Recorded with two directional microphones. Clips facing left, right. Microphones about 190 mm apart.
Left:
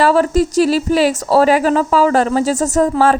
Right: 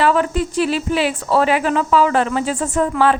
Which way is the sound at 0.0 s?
40° left (ahead or behind).